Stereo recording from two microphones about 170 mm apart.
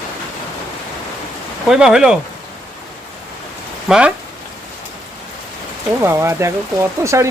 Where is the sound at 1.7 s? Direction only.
5° right (ahead or behind).